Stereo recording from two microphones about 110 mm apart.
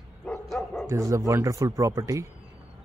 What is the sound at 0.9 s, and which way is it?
Speech, 30° right (ahead or behind).